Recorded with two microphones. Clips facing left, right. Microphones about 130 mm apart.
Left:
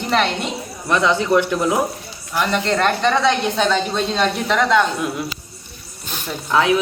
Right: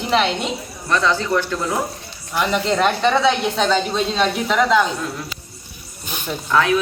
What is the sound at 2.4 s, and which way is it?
Speech, 5° right (ahead or behind).